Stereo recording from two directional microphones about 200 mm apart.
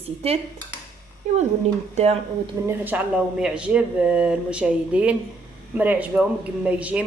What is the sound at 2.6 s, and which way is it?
A woman's voice, 10° right (ahead or behind).